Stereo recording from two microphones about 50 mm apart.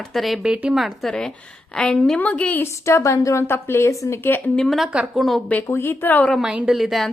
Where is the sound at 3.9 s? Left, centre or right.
Left.